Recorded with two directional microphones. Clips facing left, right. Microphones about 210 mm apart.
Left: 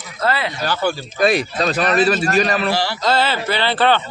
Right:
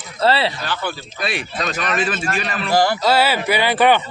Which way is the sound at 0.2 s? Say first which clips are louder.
Right 3 dB; 30° right (ahead or behind).